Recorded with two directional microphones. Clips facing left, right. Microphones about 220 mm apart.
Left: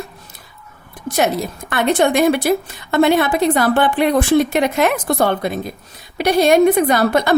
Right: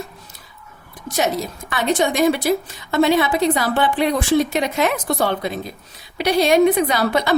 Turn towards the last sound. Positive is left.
turn(degrees=50)  # may be behind; listen again after turning